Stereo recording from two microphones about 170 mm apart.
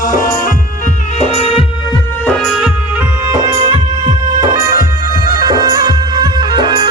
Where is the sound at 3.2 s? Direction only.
20° right (ahead or behind).